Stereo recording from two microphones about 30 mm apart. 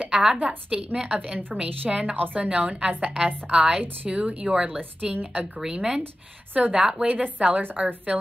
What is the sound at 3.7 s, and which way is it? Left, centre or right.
Speech, right.